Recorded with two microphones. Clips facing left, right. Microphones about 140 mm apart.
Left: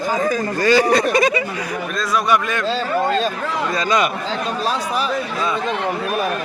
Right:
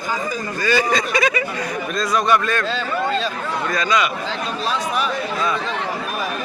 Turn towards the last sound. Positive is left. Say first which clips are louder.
# left 1 dB
turn(degrees=35)  # may be behind; listen again after turning